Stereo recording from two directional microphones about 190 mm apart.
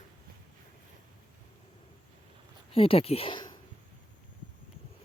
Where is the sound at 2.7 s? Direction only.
30° left (ahead or behind).